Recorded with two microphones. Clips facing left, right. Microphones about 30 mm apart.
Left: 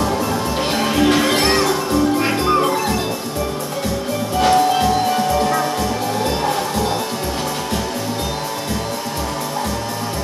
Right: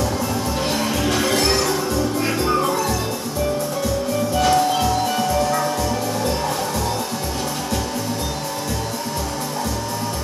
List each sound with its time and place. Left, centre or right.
0.7 s music: left
2.2 s music: left
4.4 s music: left